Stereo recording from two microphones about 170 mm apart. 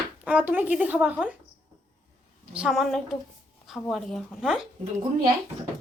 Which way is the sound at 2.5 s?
5° right (ahead or behind).